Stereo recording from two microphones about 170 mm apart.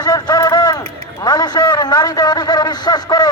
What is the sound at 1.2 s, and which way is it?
A man's voice, 25° left (ahead or behind).